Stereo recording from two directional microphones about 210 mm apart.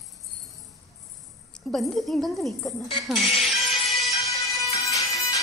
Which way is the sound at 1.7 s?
Centre (ahead or behind).